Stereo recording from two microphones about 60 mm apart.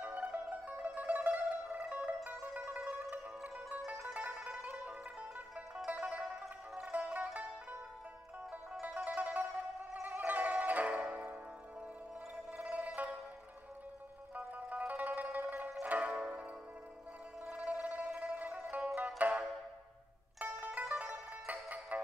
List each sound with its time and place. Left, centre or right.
0.0 s zither: right
3.0 s music: right
6.4 s music: centre
6.9 s music: right
8.8 s music: right
12.6 s music: right
14.3 s zither: right
17.5 s a sound: right
18.0 s music: right
18.9 s zither: right
20.3 s music: right